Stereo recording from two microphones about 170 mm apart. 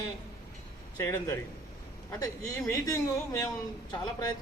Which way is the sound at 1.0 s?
20° left (ahead or behind).